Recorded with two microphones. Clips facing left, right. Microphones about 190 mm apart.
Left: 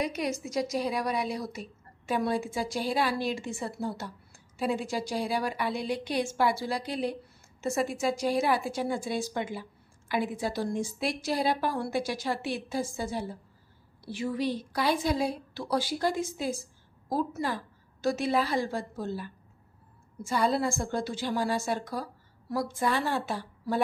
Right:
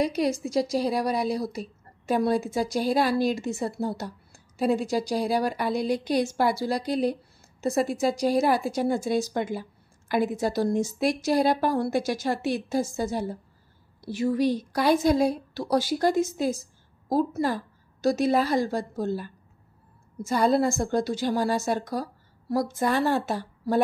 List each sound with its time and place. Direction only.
0.0 s a woman's voice: 35° right (ahead or behind)